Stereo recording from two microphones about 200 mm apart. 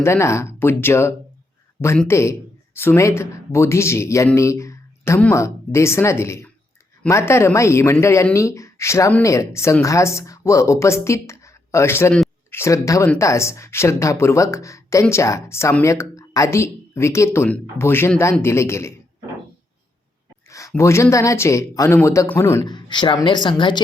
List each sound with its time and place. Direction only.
0.0 s speech: 15° left (ahead or behind)
20.5 s speech: 15° left (ahead or behind)